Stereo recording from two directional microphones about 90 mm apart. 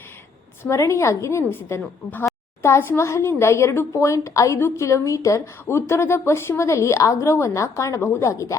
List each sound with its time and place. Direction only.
0.6 s speech: 35° left (ahead or behind)